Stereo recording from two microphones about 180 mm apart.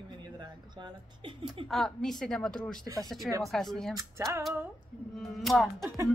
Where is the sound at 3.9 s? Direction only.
15° right (ahead or behind).